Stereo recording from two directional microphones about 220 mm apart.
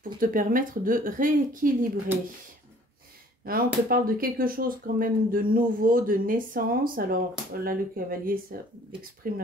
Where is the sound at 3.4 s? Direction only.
40° right (ahead or behind).